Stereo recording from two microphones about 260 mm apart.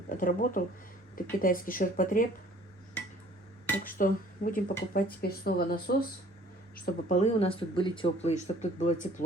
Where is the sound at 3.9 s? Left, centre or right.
Left.